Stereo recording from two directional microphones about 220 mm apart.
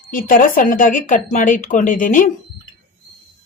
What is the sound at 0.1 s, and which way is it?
Speech, 40° left (ahead or behind).